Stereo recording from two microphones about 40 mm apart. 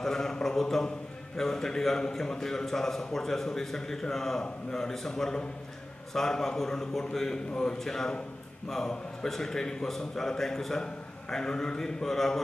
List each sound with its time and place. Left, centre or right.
0.0 s a man's voice: centre